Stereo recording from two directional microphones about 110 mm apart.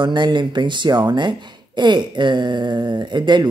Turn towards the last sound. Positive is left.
turn(degrees=-45)  # may be behind; listen again after turning